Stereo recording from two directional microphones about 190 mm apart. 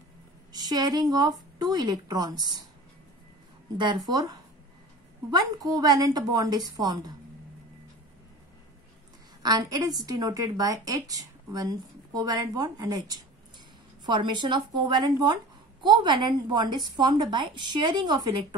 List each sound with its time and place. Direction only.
0.5 s a woman's voice: 20° right (ahead or behind)
3.7 s a woman's voice: 25° right (ahead or behind)
9.4 s a woman's voice: 20° right (ahead or behind)